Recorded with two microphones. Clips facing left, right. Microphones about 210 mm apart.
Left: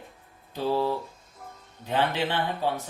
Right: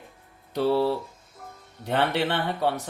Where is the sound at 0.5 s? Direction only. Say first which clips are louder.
Right 4 dB; 70° right (ahead or behind).